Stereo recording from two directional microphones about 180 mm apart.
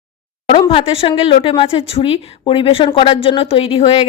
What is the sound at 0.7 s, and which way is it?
A woman's voice, 35° left (ahead or behind).